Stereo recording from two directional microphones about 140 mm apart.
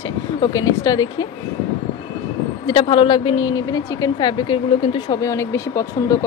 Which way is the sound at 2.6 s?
35° left (ahead or behind).